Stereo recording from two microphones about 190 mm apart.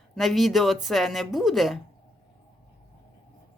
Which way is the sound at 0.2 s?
Centre (ahead or behind).